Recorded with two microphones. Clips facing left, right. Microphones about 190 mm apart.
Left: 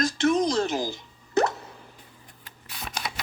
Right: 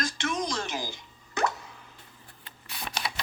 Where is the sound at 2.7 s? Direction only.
5° right (ahead or behind).